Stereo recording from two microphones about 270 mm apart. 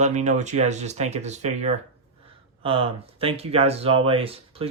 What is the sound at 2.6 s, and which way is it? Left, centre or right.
Speech, right.